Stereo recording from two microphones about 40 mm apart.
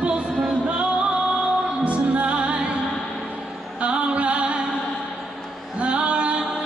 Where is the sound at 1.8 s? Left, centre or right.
Right.